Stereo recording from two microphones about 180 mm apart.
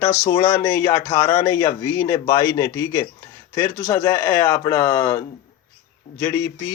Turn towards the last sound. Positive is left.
turn(degrees=10)  # may be behind; listen again after turning